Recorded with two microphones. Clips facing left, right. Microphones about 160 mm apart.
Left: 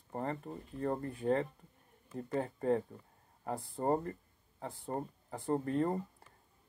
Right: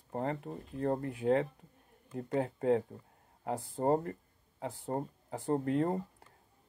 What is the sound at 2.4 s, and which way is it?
Speech, 70° right (ahead or behind).